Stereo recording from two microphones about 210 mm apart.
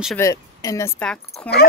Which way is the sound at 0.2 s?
15° left (ahead or behind).